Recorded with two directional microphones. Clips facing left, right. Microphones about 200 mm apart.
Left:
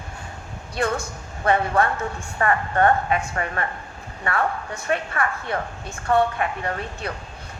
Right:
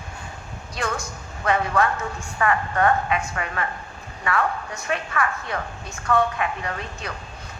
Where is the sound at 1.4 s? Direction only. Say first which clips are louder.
Left 1 dB; 30° left (ahead or behind).